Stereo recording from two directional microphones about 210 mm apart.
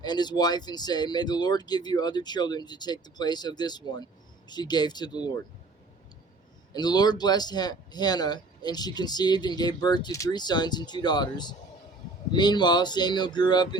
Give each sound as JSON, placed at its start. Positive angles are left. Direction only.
{"t": 0.0, "sound": "speech", "side_deg": 20}
{"t": 6.7, "sound": "speech", "side_deg": 20}